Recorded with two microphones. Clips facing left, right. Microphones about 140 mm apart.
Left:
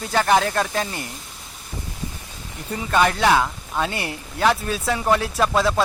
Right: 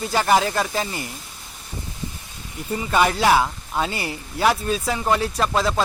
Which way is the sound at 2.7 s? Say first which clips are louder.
Even; 5° right (ahead or behind).